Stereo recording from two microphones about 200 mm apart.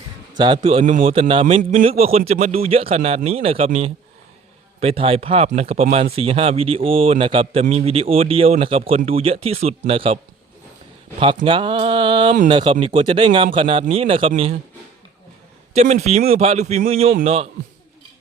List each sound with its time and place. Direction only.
0.3 s speech: 25° right (ahead or behind)
11.4 s speech: 25° right (ahead or behind)
15.7 s speech: 35° right (ahead or behind)